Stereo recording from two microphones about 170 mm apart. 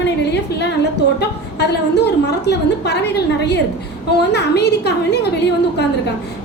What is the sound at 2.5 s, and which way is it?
A woman's voice, 80° left.